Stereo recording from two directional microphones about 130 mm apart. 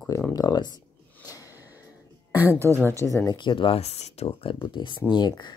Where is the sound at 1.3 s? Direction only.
25° left (ahead or behind).